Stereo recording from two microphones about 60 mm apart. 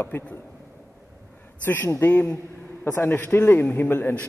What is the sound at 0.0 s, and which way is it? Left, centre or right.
Speech, left.